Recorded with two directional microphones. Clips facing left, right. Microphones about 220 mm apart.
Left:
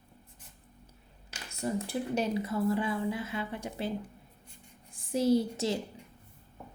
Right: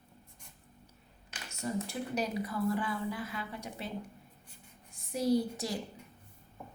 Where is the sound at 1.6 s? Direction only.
30° left (ahead or behind).